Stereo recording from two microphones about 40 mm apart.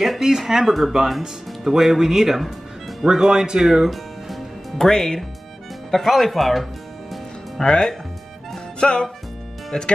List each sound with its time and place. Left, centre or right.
0.0 s speech: centre
4.7 s speech: centre
5.9 s music: centre
7.6 s speech: centre
8.7 s music: left
9.7 s speech: centre